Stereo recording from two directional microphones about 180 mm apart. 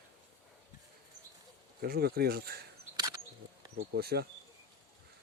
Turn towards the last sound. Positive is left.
turn(degrees=-60)  # may be behind; listen again after turning